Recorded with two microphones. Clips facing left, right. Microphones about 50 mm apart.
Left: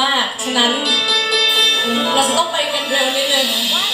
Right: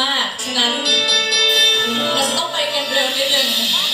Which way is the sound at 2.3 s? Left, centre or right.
Centre.